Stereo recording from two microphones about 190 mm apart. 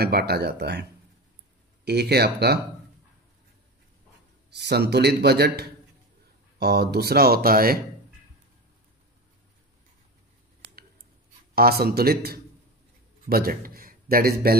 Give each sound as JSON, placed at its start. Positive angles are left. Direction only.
{"t": 0.0, "sound": "a man's voice", "side_deg": -55}
{"t": 1.9, "sound": "a man's voice", "side_deg": -60}
{"t": 4.5, "sound": "a man's voice", "side_deg": -60}
{"t": 11.5, "sound": "a man's voice", "side_deg": -55}